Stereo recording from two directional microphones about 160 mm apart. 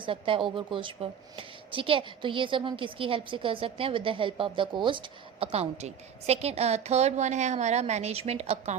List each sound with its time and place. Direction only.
0.0 s a woman's voice: 35° right (ahead or behind)